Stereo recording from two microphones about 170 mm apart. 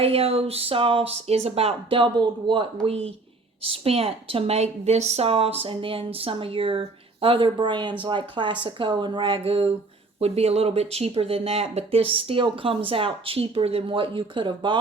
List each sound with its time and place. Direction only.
0.0 s speech: 35° right (ahead or behind)